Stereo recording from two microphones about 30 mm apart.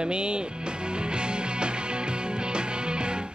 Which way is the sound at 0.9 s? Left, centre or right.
Right.